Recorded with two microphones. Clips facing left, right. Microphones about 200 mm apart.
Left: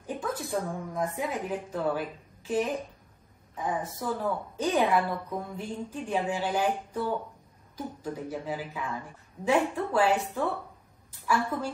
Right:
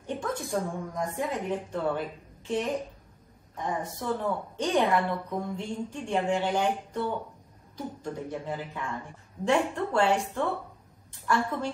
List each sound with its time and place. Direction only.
0.0 s a woman's voice: 5° left (ahead or behind)